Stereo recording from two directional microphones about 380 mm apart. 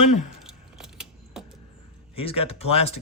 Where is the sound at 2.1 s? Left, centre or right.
Centre.